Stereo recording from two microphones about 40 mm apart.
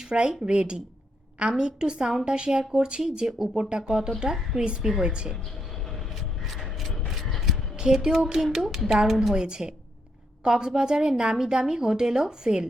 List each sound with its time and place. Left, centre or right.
0.0 s a woman's voice: right
5.9 s vehicle: centre
6.6 s mechanisms: centre
7.5 s a sound: centre
8.5 s a woman's voice: centre
9.3 s a woman's voice: centre